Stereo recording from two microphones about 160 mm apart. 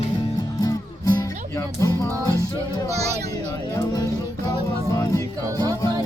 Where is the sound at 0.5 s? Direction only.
25° left (ahead or behind).